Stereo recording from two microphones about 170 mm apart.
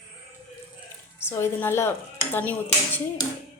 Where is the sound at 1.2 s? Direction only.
15° left (ahead or behind).